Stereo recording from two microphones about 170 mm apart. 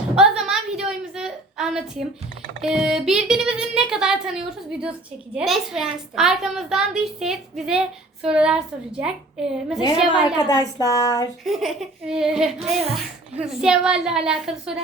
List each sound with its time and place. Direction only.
0.2 s a sound: 5° right (ahead or behind)
2.6 s a woman's voice: centre (ahead or behind)
10.3 s speech: 20° left (ahead or behind)
11.4 s a woman's voice: centre (ahead or behind)